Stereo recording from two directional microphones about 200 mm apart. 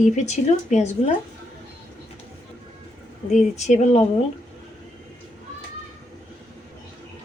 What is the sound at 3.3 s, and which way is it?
Speech, 35° left (ahead or behind).